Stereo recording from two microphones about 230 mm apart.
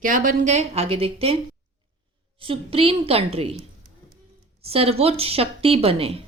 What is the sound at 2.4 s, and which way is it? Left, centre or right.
Speech, right.